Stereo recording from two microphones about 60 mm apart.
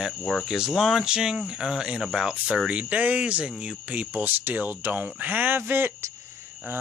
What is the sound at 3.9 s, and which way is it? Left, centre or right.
Speech, right.